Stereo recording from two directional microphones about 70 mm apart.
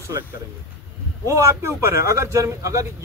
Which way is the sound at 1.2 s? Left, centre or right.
Right.